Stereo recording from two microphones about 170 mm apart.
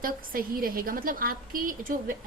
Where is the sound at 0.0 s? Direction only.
60° right (ahead or behind).